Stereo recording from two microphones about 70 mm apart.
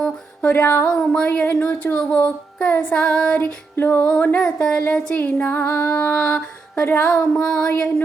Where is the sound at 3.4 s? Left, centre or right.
Left.